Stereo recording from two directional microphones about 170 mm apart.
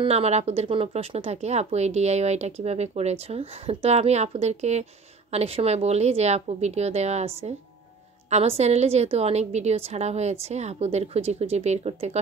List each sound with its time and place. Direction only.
0.0 s speech: 40° right (ahead or behind)